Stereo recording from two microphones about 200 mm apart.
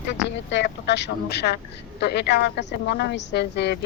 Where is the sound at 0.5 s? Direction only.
60° left (ahead or behind).